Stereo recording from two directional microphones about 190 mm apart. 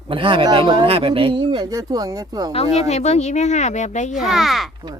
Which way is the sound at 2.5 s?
35° left (ahead or behind).